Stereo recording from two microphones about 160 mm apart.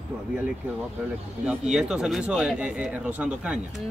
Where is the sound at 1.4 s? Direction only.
5° right (ahead or behind).